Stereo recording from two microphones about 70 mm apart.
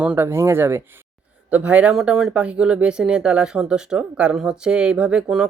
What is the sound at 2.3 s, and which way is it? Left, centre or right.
Speech, centre.